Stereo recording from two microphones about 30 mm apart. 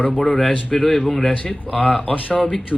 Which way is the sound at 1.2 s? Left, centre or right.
Left.